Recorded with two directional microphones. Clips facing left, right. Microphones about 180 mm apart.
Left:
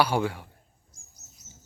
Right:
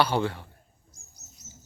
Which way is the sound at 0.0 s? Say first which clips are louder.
Even; 10° left (ahead or behind).